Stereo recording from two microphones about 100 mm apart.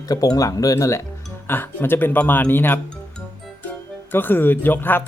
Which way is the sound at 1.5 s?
20° left (ahead or behind).